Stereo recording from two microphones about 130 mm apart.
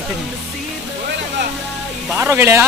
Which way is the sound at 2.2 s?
20° right (ahead or behind).